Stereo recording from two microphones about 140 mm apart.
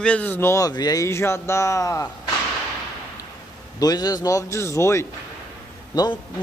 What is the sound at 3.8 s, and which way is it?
Speech, 25° left (ahead or behind).